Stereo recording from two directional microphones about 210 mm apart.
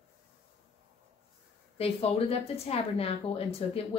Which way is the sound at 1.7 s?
30° left (ahead or behind).